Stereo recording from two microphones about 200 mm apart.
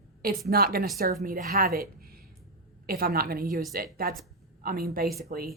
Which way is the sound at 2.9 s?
50° right (ahead or behind).